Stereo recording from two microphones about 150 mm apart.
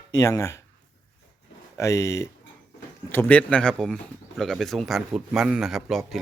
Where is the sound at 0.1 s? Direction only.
20° left (ahead or behind).